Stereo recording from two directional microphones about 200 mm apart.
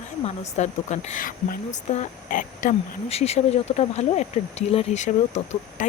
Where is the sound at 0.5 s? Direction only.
35° left (ahead or behind).